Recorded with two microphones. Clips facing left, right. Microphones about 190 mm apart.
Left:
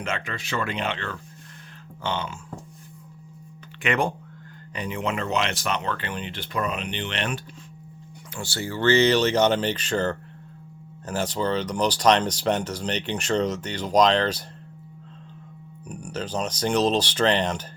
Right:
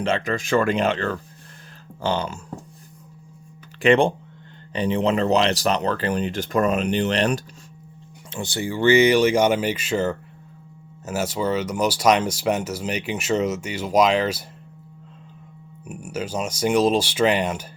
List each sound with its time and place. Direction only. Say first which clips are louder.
0.0 s speech: right 8 dB; 30° right (ahead or behind)
0.3 s speech: right 9 dB; 45° right (ahead or behind)
3.8 s speech: right 8 dB; 30° right (ahead or behind)
8.3 s speech: right 4 dB; 20° right (ahead or behind)
15.9 s speech: right 2 dB; 5° right (ahead or behind)